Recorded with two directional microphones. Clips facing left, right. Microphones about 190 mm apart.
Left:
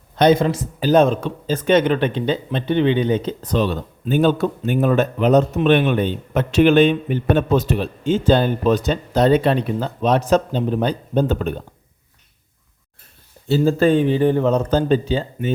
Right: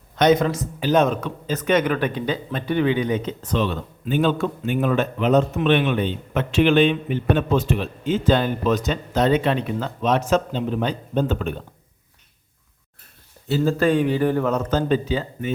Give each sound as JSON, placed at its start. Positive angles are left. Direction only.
{"t": 0.2, "sound": "speech", "side_deg": 30}
{"t": 13.7, "sound": "speech", "side_deg": 25}